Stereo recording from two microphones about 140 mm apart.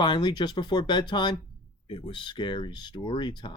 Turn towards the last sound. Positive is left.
turn(degrees=35)  # may be behind; listen again after turning